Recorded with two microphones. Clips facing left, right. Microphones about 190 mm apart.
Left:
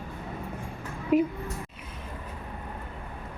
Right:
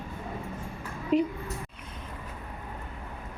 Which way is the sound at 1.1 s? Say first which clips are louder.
Left 2 dB; 10° left (ahead or behind).